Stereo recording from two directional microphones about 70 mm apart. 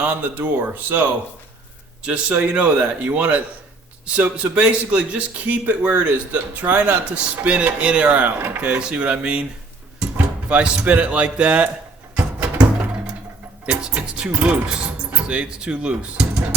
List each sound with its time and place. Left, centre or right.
0.0 s a man's voice: right
2.0 s a man's voice: centre
8.7 s a man's voice: centre
12.1 s music: centre
13.7 s a man's voice: centre